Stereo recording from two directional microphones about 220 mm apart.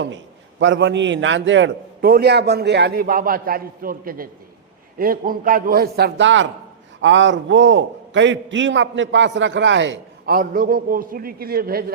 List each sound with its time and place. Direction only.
0.6 s a man's voice: 55° right (ahead or behind)
10.3 s a man's voice: 40° right (ahead or behind)